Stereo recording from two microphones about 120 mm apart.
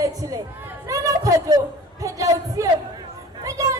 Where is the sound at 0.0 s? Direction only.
30° right (ahead or behind).